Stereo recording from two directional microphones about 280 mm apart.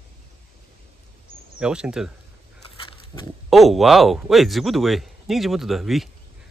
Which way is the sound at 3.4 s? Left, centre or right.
Centre.